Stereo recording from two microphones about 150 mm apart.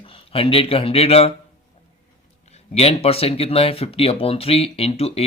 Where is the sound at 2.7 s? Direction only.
40° left (ahead or behind).